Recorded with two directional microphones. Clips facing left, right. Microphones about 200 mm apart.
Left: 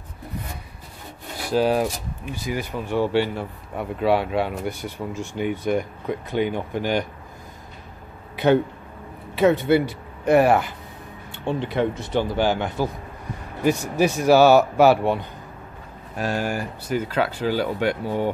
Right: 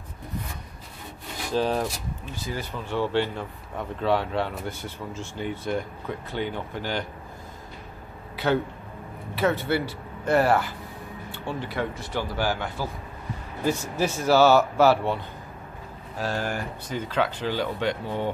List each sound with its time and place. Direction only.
1.5 s speech: 10° left (ahead or behind)
9.3 s speech: 20° left (ahead or behind)
16.2 s speech: 15° left (ahead or behind)